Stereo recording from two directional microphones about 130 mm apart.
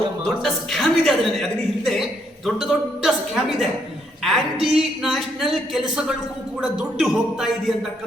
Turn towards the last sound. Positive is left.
turn(degrees=-5)  # may be behind; listen again after turning